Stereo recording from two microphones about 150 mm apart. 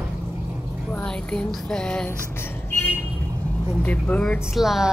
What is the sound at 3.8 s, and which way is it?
Speech, 10° left (ahead or behind).